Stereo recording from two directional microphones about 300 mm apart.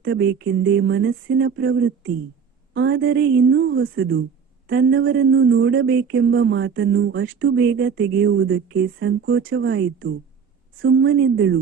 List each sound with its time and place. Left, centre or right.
0.0 s a woman's voice: right